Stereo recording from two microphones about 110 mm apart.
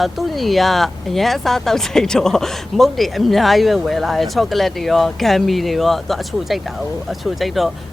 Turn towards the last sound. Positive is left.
turn(degrees=0)  # may be behind; listen again after turning